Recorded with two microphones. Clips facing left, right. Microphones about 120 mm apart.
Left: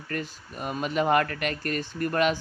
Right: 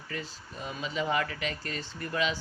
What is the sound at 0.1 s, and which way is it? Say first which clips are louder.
Speech: left 6 dB; 60° left (ahead or behind).